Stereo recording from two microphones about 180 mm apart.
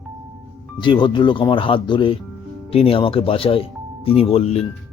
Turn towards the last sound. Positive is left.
turn(degrees=35)  # may be behind; listen again after turning